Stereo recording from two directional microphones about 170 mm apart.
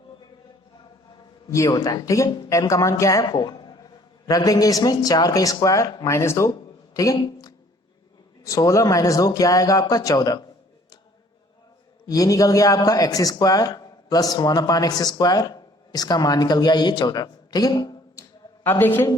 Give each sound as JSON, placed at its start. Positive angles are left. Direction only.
{"t": 1.5, "sound": "a man's voice", "side_deg": 20}
{"t": 12.0, "sound": "speech", "side_deg": 20}
{"t": 18.6, "sound": "a woman's voice", "side_deg": 10}